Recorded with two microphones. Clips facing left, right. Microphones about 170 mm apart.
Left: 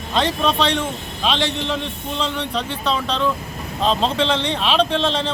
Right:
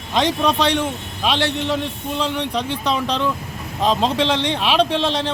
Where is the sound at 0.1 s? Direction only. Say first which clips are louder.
Right 1 dB; 15° right (ahead or behind).